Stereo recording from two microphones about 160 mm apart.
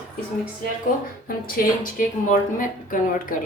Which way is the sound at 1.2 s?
65° left (ahead or behind).